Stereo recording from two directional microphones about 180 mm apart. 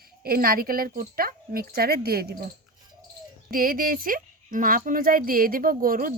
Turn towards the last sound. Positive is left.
turn(degrees=-50)  # may be behind; listen again after turning